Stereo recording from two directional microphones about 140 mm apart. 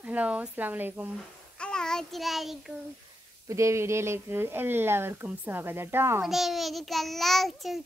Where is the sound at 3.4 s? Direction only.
20° right (ahead or behind).